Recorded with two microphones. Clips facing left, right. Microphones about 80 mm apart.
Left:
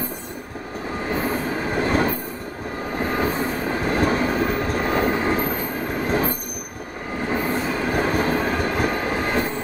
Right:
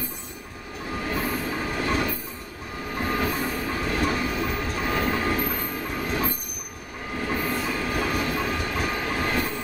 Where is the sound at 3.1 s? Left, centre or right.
Left.